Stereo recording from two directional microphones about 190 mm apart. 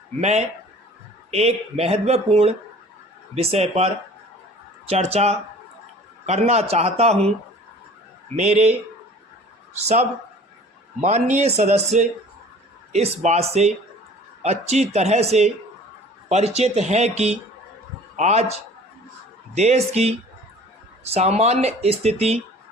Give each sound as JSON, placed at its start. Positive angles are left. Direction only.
{"t": 0.2, "sound": "speech", "side_deg": -35}
{"t": 8.4, "sound": "speech", "side_deg": -35}
{"t": 9.7, "sound": "speech", "side_deg": -35}
{"t": 16.6, "sound": "speech", "side_deg": -35}